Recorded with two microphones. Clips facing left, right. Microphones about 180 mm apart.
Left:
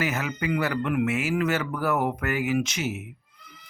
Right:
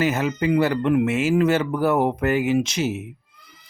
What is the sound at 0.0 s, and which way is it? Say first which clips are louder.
Speech: right 7 dB; 25° right (ahead or behind).